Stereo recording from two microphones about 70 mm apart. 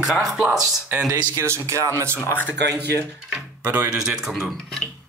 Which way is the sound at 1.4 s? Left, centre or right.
Right.